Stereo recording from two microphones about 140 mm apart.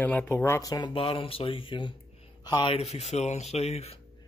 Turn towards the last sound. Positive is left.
turn(degrees=50)  # may be behind; listen again after turning